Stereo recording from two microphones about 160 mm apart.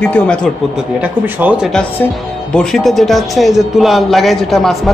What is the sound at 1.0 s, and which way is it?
Speech, 10° right (ahead or behind).